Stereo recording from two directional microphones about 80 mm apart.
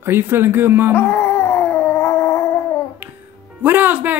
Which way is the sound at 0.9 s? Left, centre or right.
Left.